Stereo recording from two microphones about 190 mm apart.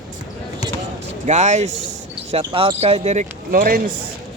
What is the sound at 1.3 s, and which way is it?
Speech, 35° right (ahead or behind).